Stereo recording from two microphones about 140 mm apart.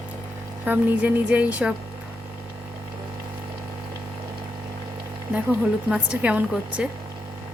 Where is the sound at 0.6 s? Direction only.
10° right (ahead or behind).